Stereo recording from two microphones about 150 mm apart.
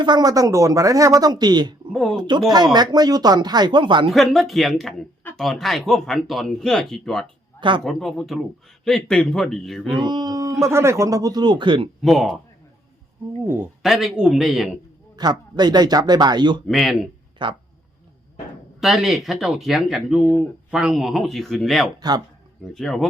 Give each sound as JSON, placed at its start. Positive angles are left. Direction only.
{"t": 0.0, "sound": "speech", "side_deg": -25}
{"t": 1.9, "sound": "speech", "side_deg": 0}
{"t": 2.1, "sound": "speech", "side_deg": -30}
{"t": 4.1, "sound": "speech", "side_deg": 0}
{"t": 10.1, "sound": "speech", "side_deg": -25}
{"t": 12.0, "sound": "speech", "side_deg": 0}
{"t": 13.4, "sound": "speech", "side_deg": -15}
{"t": 13.8, "sound": "speech", "side_deg": 0}
{"t": 15.1, "sound": "speech", "side_deg": -30}
{"t": 16.6, "sound": "speech", "side_deg": 0}
{"t": 17.4, "sound": "speech", "side_deg": -30}
{"t": 18.8, "sound": "speech", "side_deg": 0}